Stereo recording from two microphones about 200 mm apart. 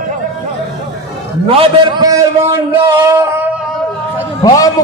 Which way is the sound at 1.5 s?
25° right (ahead or behind).